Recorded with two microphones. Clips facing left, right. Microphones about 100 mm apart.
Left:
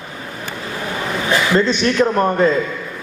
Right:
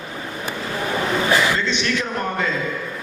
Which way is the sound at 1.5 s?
40° left (ahead or behind).